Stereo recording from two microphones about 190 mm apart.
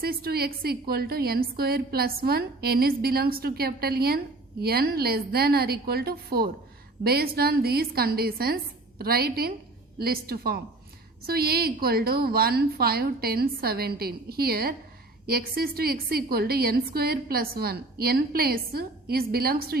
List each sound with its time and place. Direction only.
0.0 s a woman's voice: 55° right (ahead or behind)